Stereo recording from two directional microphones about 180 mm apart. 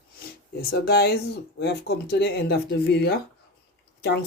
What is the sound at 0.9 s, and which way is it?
Speech, 60° left (ahead or behind).